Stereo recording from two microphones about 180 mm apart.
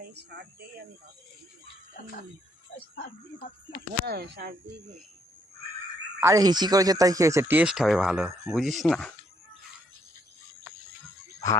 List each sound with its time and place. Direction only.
0.0 s a sound: 65° right (ahead or behind)
2.9 s speech: 55° left (ahead or behind)
4.0 s speech: 60° right (ahead or behind)
6.1 s speech: 20° right (ahead or behind); by 9.1 s centre (ahead or behind)